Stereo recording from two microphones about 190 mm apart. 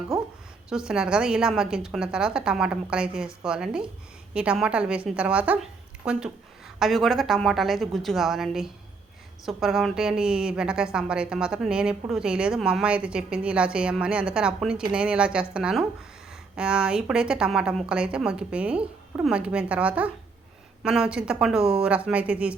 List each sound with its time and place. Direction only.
0.7 s a woman's voice: 5° right (ahead or behind)